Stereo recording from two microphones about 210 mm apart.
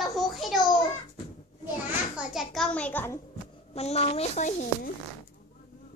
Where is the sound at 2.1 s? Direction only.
Centre (ahead or behind).